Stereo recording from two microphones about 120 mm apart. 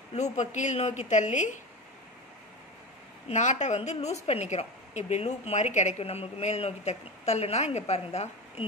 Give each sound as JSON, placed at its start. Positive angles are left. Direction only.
{"t": 0.1, "sound": "a woman's voice", "side_deg": 75}
{"t": 3.3, "sound": "a woman's voice", "side_deg": 80}